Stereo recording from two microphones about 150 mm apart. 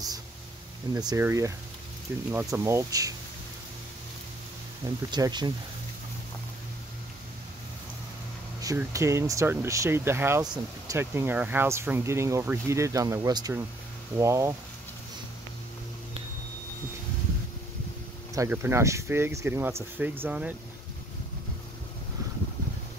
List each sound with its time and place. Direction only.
0.9 s speech: 25° right (ahead or behind)
4.8 s speech: 25° right (ahead or behind)
8.5 s speech: 20° right (ahead or behind)
10.4 s speech: 25° right (ahead or behind)
11.0 s speech: 15° right (ahead or behind)
18.3 s speech: 20° right (ahead or behind)